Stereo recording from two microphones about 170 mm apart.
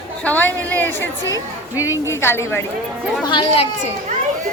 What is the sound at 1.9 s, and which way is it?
Speech, 15° left (ahead or behind).